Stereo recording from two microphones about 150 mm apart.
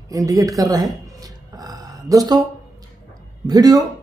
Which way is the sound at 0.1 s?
20° right (ahead or behind).